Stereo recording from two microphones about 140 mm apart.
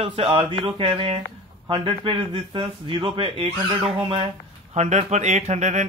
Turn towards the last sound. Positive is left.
turn(degrees=-55)  # may be behind; listen again after turning